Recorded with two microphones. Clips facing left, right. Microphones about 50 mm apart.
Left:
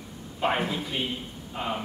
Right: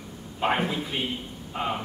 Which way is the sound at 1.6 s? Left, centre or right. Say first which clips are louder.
Right 2 dB; right.